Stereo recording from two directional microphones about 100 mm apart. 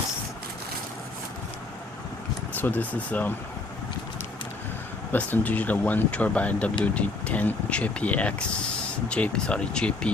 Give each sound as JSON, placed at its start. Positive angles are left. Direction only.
{"t": 2.6, "sound": "speech", "side_deg": 20}
{"t": 5.1, "sound": "speech", "side_deg": 15}